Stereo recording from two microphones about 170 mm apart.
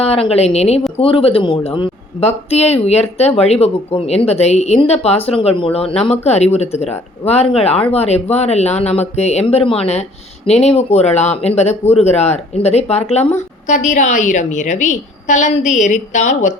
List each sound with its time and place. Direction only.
0.0 s a woman's voice: 35° left (ahead or behind)